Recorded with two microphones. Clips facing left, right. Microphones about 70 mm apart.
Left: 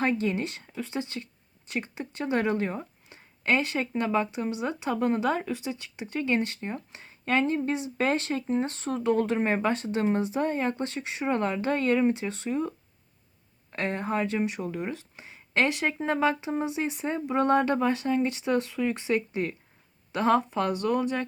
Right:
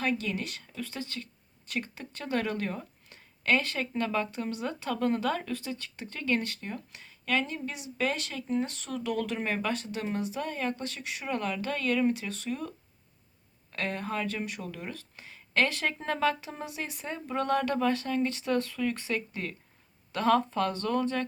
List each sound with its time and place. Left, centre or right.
0.0 s speech: left
13.7 s speech: left